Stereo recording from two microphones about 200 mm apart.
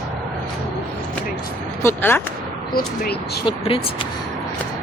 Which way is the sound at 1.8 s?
10° left (ahead or behind).